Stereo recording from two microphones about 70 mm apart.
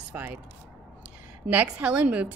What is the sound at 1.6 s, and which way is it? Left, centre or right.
Speech, centre.